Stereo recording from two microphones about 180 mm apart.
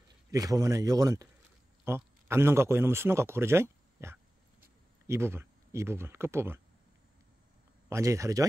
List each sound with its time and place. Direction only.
0.3 s a man's voice: 20° right (ahead or behind)
7.9 s speech: 15° right (ahead or behind)